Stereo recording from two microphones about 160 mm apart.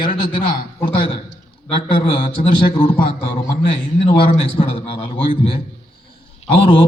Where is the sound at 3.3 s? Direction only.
35° left (ahead or behind).